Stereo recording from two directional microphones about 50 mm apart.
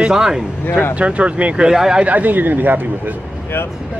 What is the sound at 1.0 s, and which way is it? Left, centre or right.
Speech, right.